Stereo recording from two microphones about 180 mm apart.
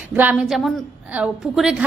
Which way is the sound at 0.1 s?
10° right (ahead or behind).